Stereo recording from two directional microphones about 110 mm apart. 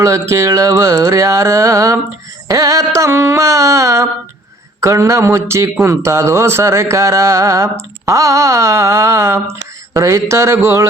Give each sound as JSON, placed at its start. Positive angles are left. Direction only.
{"t": 0.0, "sound": "speech", "side_deg": -30}